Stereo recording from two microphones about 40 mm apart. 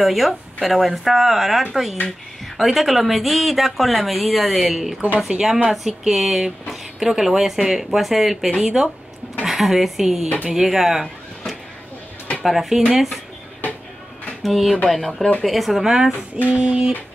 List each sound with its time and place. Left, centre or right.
0.0 s speech: centre
12.4 s speech: centre
14.4 s speech: centre
15.8 s speech: centre
16.4 s a sound: right